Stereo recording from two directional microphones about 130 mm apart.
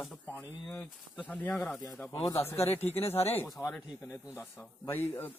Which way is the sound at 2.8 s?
50° left (ahead or behind).